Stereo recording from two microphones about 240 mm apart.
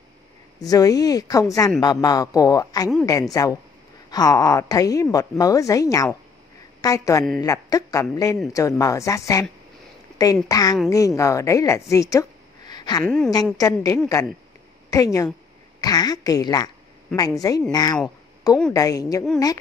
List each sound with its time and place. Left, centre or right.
0.6 s a woman's voice: centre
13.0 s a woman's voice: centre
13.6 s speech: centre
18.0 s a sound: centre
18.7 s speech: centre